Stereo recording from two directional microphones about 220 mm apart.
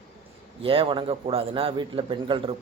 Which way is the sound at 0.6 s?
25° right (ahead or behind).